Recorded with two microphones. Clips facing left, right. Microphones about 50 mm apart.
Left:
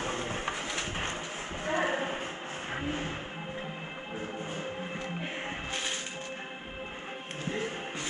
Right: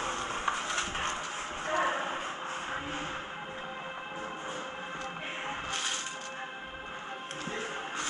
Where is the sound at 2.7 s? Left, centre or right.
Left.